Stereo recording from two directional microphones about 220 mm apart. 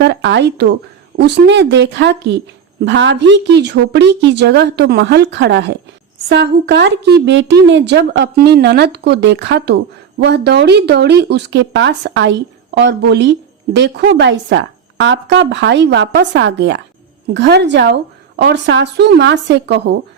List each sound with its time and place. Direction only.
0.0 s speech: 55° right (ahead or behind)